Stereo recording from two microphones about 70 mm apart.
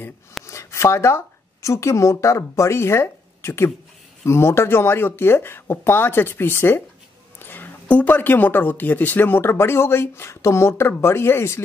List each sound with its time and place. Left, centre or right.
0.5 s speech: left